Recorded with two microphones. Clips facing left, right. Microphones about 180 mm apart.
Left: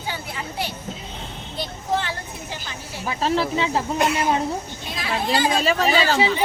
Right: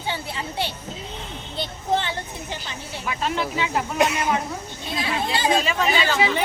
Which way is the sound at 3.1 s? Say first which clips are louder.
Left 4 dB; 35° left (ahead or behind).